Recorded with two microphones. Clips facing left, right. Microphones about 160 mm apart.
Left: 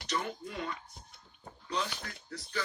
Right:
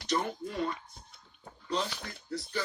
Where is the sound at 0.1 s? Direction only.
40° right (ahead or behind).